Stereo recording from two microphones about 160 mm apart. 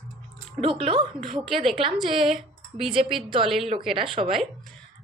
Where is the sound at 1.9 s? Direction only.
Centre (ahead or behind).